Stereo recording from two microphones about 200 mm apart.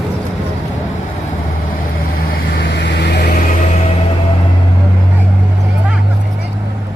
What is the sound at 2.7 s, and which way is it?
Vehicle, 60° left (ahead or behind).